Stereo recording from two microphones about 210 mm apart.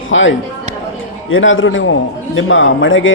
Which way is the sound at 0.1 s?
65° left (ahead or behind).